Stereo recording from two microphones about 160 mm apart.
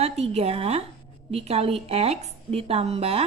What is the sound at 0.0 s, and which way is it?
Speech, 40° right (ahead or behind).